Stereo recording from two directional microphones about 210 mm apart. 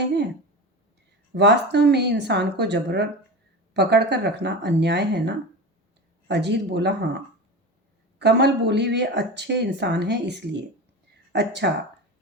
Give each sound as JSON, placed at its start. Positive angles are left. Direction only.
{"t": 1.3, "sound": "speech", "side_deg": -55}
{"t": 8.2, "sound": "speech", "side_deg": -55}